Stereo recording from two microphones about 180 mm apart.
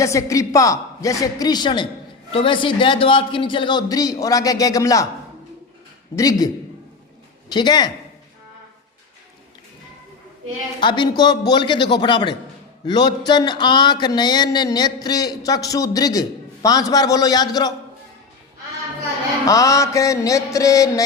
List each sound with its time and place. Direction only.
0.0 s a man's voice: 15° left (ahead or behind)
6.1 s a man's voice: 20° left (ahead or behind)
7.5 s a man's voice: 25° left (ahead or behind)
10.8 s a man's voice: 25° left (ahead or behind)
19.5 s mantra: 20° left (ahead or behind)